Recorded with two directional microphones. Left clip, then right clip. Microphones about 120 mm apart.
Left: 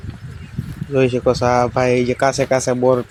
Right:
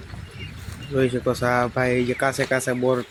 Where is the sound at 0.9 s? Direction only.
30° left (ahead or behind).